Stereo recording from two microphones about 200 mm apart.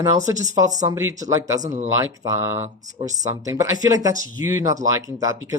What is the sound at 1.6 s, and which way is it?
Speech, 35° right (ahead or behind).